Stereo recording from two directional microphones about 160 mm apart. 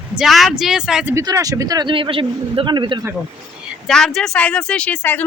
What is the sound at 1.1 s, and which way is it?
A man's voice, 20° right (ahead or behind).